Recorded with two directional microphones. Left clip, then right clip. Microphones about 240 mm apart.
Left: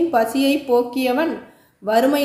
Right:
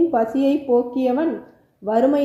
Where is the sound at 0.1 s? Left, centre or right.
Left.